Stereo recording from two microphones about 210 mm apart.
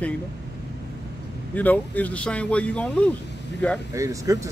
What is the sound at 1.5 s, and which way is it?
Speech, 10° left (ahead or behind).